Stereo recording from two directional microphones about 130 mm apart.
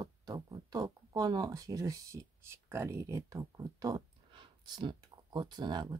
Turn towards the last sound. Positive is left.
turn(degrees=-35)  # may be behind; listen again after turning